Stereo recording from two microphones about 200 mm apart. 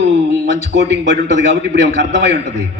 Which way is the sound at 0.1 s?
35° left (ahead or behind).